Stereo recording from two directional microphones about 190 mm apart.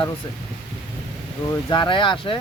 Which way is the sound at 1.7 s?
25° left (ahead or behind).